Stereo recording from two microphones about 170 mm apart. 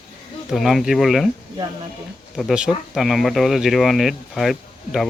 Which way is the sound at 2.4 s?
5° right (ahead or behind).